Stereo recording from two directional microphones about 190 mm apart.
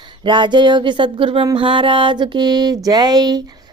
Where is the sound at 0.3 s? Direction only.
25° right (ahead or behind).